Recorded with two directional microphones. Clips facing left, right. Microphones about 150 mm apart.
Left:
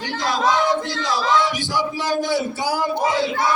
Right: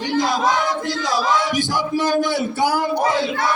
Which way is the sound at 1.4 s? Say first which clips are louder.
Even; 45° right (ahead or behind).